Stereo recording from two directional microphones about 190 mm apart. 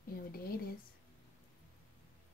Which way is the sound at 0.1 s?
50° left (ahead or behind).